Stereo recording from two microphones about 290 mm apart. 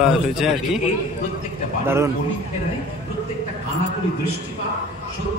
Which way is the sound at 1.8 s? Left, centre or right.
Centre.